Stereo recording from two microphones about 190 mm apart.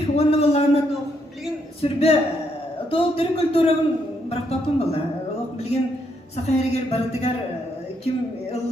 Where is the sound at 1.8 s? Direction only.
30° left (ahead or behind).